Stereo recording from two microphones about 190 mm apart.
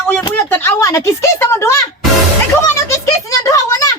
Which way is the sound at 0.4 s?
15° left (ahead or behind).